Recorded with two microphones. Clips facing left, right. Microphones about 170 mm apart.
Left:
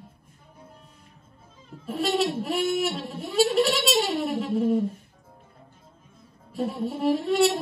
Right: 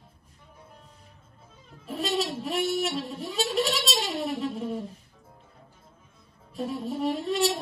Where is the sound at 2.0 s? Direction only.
Centre (ahead or behind).